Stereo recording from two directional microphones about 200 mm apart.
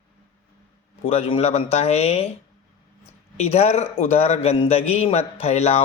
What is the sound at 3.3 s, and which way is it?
Speech, 30° left (ahead or behind).